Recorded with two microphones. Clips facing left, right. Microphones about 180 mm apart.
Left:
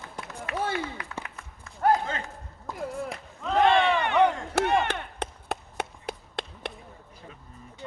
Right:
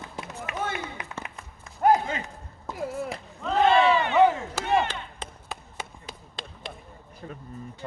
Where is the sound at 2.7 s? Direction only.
Centre (ahead or behind).